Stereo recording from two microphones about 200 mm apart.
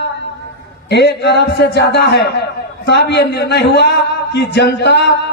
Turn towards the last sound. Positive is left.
turn(degrees=55)  # may be behind; listen again after turning